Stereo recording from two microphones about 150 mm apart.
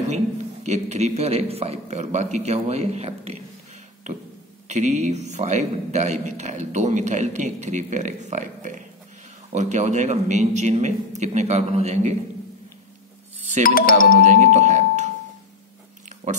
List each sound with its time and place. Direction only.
0.1 s a man's voice: 50° right (ahead or behind)
4.6 s a man's voice: 50° right (ahead or behind)
13.6 s music: 70° left (ahead or behind)
14.2 s speech: 55° right (ahead or behind)